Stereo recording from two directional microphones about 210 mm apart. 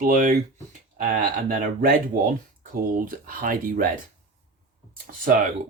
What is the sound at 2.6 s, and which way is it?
Speech, 40° right (ahead or behind).